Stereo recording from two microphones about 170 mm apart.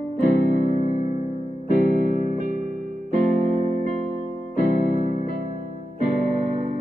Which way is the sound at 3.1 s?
45° right (ahead or behind).